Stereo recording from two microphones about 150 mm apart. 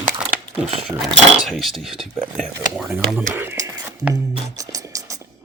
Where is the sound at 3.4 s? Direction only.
15° right (ahead or behind).